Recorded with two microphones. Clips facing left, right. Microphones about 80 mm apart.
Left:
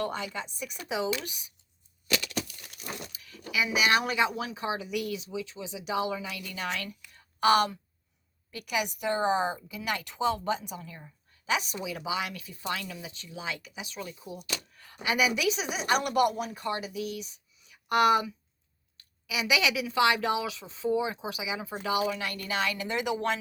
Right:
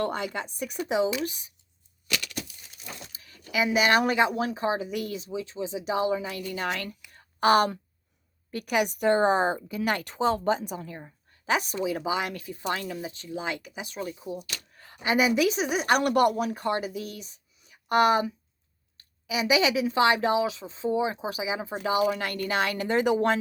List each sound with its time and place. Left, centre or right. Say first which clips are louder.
0.0 s speech: right 4 dB; right
0.8 s speech: right 5 dB; right
2.3 s a sound: left 3 dB; left
3.1 s zipper: even; right
3.8 s speech: right 4 dB; right
7.1 s a sound: right 2 dB; right
8.4 s a woman's voice: right 5 dB; right
22.1 s speech: right 4 dB; right